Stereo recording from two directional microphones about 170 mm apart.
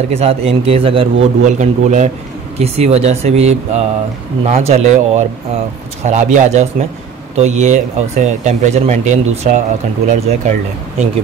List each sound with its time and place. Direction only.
0.1 s speech: 35° right (ahead or behind)
1.2 s speech: 45° right (ahead or behind)